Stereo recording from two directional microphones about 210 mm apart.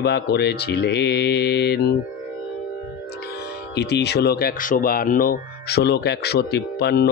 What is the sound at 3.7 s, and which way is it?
Speech, 50° left (ahead or behind).